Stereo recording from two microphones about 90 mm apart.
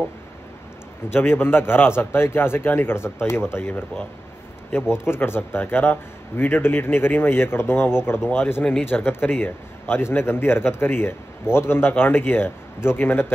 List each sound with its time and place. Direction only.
1.1 s a man's voice: 25° left (ahead or behind)
5.0 s a man's voice: 25° left (ahead or behind)